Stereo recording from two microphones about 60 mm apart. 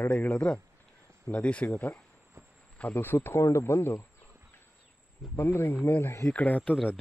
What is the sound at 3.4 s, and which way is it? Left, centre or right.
Speech, left.